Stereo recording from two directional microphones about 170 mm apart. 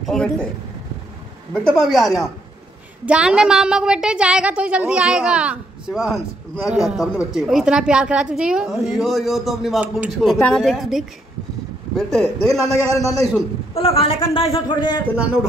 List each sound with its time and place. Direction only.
0.0 s a man's voice: 5° left (ahead or behind)
1.5 s a woman's voice: 5° left (ahead or behind)
12.7 s a man's voice: 20° left (ahead or behind)
13.7 s a man's voice: 35° left (ahead or behind)